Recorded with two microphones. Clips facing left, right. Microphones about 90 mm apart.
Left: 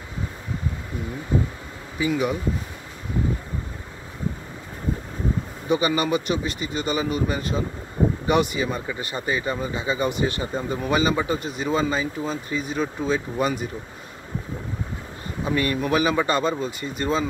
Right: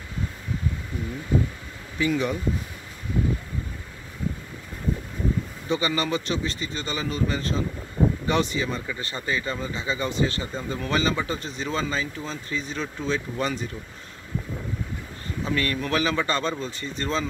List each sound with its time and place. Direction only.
2.0 s speech: 10° left (ahead or behind)
5.7 s speech: 15° left (ahead or behind)
15.4 s speech: 15° left (ahead or behind)